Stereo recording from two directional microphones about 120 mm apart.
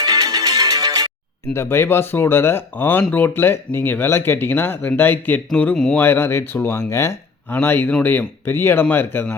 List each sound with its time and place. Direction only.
0.0 s music: 30° right (ahead or behind)
1.5 s speech: 20° left (ahead or behind)
6.0 s speech: 20° left (ahead or behind)